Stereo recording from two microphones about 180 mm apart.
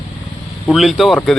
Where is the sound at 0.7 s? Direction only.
Centre (ahead or behind).